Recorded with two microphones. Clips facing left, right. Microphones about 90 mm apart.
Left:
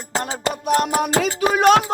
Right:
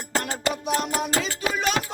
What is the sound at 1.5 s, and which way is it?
Music, 50° left (ahead or behind).